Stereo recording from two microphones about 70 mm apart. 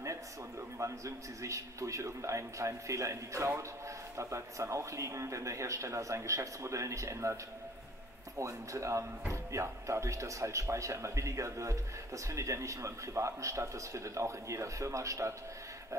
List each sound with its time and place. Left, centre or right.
0.7 s speech: right
8.4 s speech: right